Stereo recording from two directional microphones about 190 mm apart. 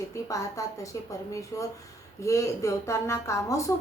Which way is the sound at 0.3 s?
15° left (ahead or behind).